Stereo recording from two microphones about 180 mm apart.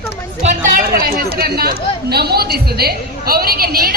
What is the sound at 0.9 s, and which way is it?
A man's voice, 60° right (ahead or behind).